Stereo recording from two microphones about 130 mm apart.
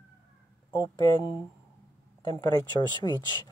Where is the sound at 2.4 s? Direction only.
35° left (ahead or behind).